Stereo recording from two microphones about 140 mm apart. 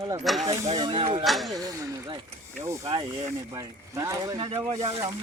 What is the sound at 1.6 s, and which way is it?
Speech, 25° right (ahead or behind).